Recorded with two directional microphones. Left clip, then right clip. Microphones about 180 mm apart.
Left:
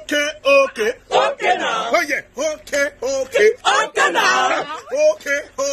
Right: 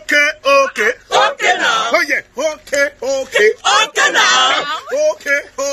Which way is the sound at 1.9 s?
35° right (ahead or behind).